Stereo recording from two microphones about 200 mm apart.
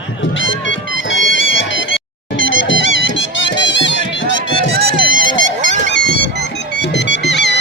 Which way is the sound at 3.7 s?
65° left (ahead or behind).